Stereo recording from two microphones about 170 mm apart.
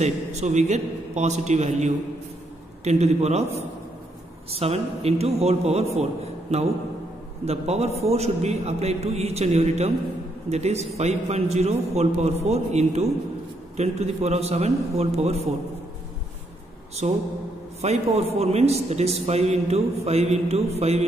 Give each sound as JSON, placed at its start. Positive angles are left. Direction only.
{"t": 0.0, "sound": "a man's voice", "side_deg": -40}
{"t": 7.4, "sound": "a man's voice", "side_deg": -40}
{"t": 17.0, "sound": "a man's voice", "side_deg": -40}